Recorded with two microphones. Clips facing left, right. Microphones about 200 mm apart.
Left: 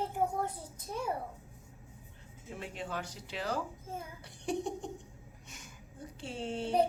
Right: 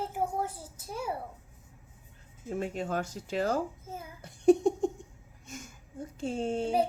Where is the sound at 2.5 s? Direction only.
45° right (ahead or behind).